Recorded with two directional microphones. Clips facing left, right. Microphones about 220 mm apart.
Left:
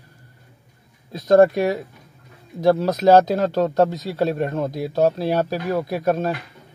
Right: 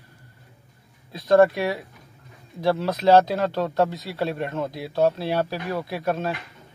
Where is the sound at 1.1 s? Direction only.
45° left (ahead or behind).